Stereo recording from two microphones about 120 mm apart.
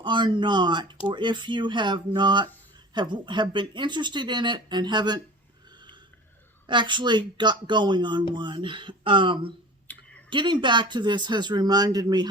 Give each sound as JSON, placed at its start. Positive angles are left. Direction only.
{"t": 0.0, "sound": "speech", "side_deg": -40}
{"t": 6.7, "sound": "speech", "side_deg": -40}
{"t": 9.9, "sound": "clicking", "side_deg": 15}
{"t": 10.2, "sound": "speech", "side_deg": -40}